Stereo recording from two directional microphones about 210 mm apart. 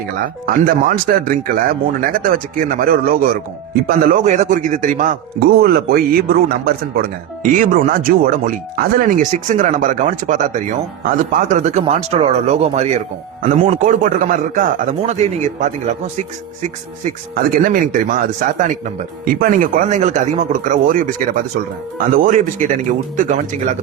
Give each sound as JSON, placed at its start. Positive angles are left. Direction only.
{"t": 0.4, "sound": "a man's voice", "side_deg": -40}
{"t": 17.3, "sound": "a man's voice", "side_deg": -40}